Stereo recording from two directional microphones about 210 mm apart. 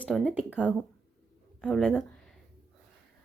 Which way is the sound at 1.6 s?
Centre (ahead or behind).